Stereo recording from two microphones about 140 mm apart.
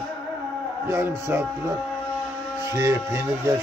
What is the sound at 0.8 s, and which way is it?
Speech, 15° right (ahead or behind).